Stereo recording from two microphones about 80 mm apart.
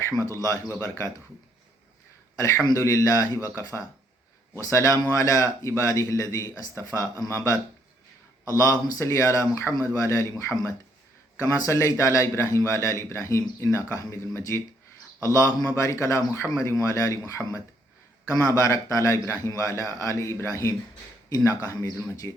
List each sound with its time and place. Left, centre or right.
0.3 s a man's voice: left
2.7 s a man's voice: left
16.5 s a man's voice: left